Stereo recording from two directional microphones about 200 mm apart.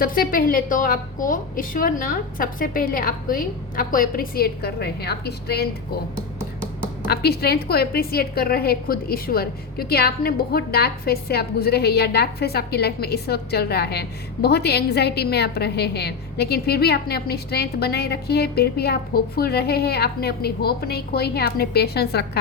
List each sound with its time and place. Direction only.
0.0 s a woman's voice: 45° left (ahead or behind)
7.1 s a woman's voice: 50° left (ahead or behind)